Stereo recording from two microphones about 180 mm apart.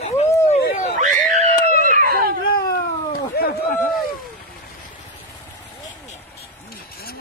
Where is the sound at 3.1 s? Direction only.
55° left (ahead or behind).